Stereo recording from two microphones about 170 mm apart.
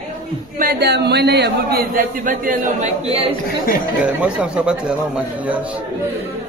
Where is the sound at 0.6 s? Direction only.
70° right (ahead or behind); by 3.3 s 35° right (ahead or behind).